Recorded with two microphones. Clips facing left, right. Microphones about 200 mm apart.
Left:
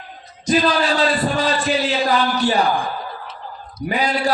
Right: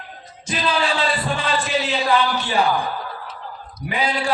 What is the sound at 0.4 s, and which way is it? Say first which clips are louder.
A man's voice: left 5 dB; 40° left (ahead or behind).